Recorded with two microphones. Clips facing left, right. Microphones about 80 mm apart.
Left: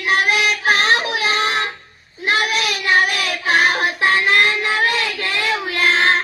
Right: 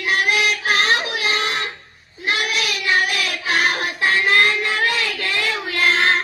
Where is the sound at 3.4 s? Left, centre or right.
Left.